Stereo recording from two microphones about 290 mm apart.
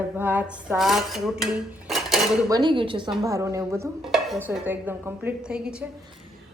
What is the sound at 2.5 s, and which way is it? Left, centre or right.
Speech, centre.